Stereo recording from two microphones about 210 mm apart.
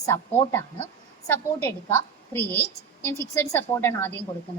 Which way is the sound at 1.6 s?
10° left (ahead or behind).